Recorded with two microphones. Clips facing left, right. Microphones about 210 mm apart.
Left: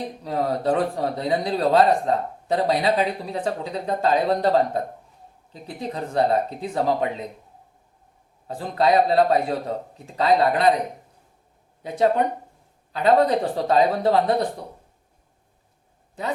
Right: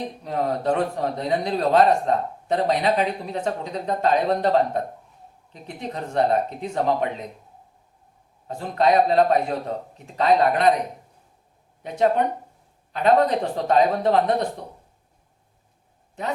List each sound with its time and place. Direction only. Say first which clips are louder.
0.3 s a man's voice: left 1 dB; 35° left (ahead or behind)
8.4 s a man's voice: even; 35° left (ahead or behind)
11.8 s a man's voice: even; 30° left (ahead or behind)